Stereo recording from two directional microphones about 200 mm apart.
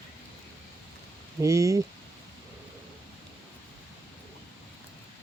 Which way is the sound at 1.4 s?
15° right (ahead or behind).